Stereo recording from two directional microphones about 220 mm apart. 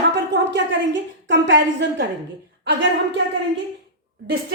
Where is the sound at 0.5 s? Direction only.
55° right (ahead or behind).